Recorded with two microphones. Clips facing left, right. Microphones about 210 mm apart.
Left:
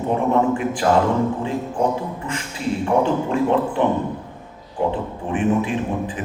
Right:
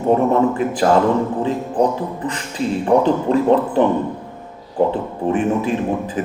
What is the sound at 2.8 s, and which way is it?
A man's voice, 35° right (ahead or behind).